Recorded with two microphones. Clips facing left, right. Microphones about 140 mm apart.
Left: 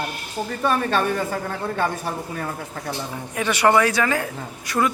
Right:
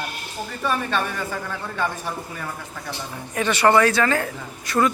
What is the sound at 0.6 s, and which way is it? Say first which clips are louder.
A man's voice: left 3 dB; 45° left (ahead or behind).